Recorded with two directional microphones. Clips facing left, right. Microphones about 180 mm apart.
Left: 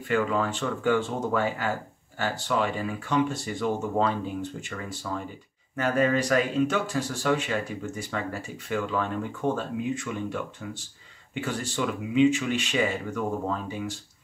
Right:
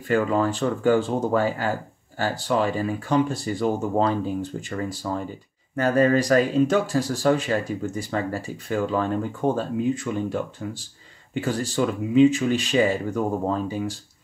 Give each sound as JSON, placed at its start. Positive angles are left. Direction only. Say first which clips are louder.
{"t": 0.1, "sound": "speech", "louder": "right 4 dB", "side_deg": -35}